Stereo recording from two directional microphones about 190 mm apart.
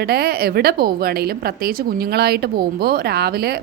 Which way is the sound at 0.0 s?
55° right (ahead or behind).